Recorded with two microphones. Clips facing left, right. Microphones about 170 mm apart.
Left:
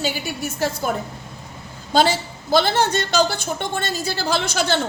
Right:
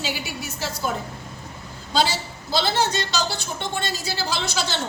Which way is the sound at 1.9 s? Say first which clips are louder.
Left 5 dB; 50° left (ahead or behind).